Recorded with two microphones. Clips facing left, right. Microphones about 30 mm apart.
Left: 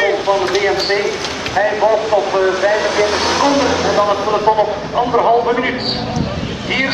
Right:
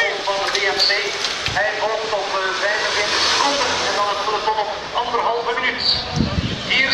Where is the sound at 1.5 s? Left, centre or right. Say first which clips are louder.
Left 8 dB; centre.